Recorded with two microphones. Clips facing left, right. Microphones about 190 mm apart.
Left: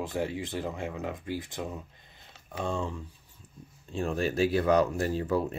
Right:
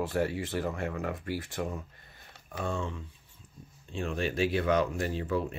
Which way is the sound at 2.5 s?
30° left (ahead or behind).